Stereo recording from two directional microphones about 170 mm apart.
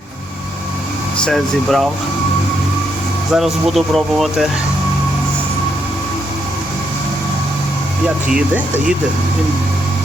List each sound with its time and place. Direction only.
1.2 s speech: centre (ahead or behind)
3.3 s speech: centre (ahead or behind)
8.3 s speech: 5° right (ahead or behind)